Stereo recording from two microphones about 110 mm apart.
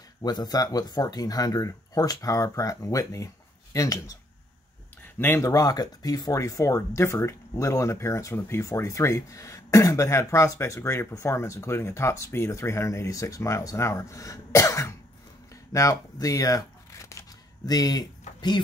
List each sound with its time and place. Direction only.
0.2 s speech: 35° left (ahead or behind)
5.2 s speech: 25° left (ahead or behind)